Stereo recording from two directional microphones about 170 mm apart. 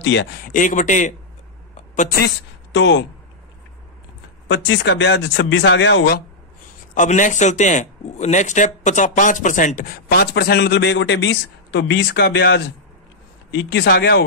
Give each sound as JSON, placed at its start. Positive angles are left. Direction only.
{"t": 0.0, "sound": "speech", "side_deg": 90}
{"t": 0.5, "sound": "a man's voice", "side_deg": 50}
{"t": 2.1, "sound": "a woman's voice", "side_deg": 80}
{"t": 4.5, "sound": "speech", "side_deg": 90}
{"t": 6.9, "sound": "a man's voice", "side_deg": 50}